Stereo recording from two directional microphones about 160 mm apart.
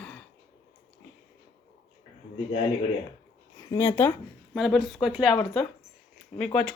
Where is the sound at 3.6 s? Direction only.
20° left (ahead or behind).